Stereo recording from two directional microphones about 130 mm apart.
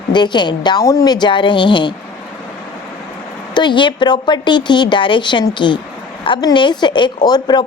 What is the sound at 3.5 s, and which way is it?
Speech, 35° left (ahead or behind).